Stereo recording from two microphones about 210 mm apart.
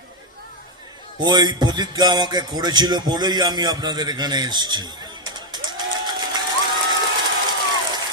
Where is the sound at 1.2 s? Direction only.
20° right (ahead or behind).